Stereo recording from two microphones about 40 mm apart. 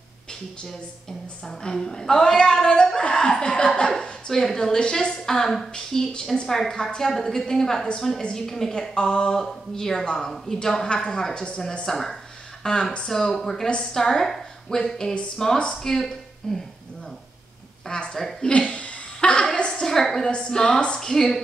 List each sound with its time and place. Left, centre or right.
1.4 s a woman's voice: centre
3.9 s a woman's voice: centre
6.4 s a woman's voice: centre
11.8 s a woman's voice: centre
12.6 s speech: left
13.1 s a woman's voice: centre
17.8 s speech: left
18.1 s a woman's voice: centre
18.5 s chuckle: left
19.5 s a sound: left
19.8 s a woman's voice: centre
20.2 s speech: left
20.5 s a woman's voice: centre